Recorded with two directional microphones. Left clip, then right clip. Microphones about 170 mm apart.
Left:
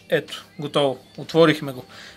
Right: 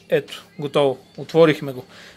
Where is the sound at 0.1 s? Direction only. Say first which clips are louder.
Right 2 dB; 35° right (ahead or behind).